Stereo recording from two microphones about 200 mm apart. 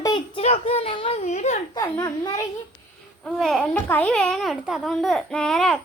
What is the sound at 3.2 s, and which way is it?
A child's voice, centre (ahead or behind).